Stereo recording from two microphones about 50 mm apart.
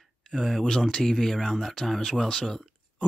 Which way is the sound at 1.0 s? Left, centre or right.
Centre.